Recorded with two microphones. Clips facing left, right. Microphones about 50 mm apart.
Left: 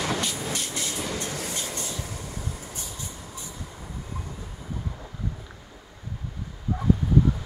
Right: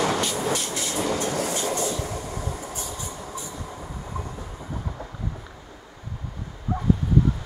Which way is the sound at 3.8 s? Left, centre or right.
Centre.